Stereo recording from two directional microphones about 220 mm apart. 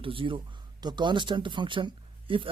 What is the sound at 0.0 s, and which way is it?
Speech, 25° right (ahead or behind).